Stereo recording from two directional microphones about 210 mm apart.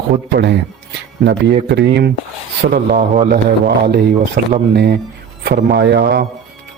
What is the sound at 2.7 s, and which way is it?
Speech, 35° right (ahead or behind).